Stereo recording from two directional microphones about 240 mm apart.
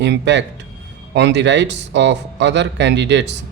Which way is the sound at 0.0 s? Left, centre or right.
Right.